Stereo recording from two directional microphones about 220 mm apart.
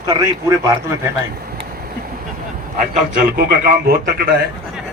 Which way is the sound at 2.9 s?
45° right (ahead or behind).